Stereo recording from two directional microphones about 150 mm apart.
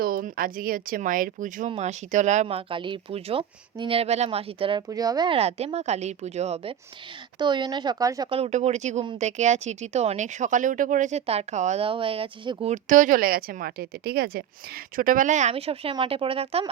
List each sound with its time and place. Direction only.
0.0 s speech: 70° right (ahead or behind)
1.7 s speech: 50° right (ahead or behind)
4.9 s speech: 25° right (ahead or behind)
5.4 s speech: 40° right (ahead or behind)
7.3 s speech: 30° right (ahead or behind)
8.3 s speech: 45° right (ahead or behind)
12.6 s speech: 55° right (ahead or behind); by 14.4 s 90° right
14.9 s speech: 65° right (ahead or behind); by 16.6 s 40° right (ahead or behind)